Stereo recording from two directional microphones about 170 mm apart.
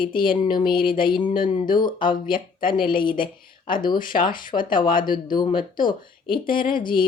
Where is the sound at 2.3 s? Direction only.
30° left (ahead or behind).